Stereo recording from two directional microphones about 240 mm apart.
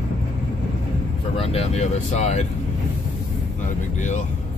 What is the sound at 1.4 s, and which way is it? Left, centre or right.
Speech, left.